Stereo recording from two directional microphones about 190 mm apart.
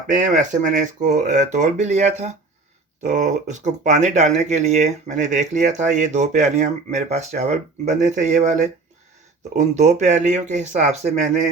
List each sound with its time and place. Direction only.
0.1 s speech: 40° right (ahead or behind)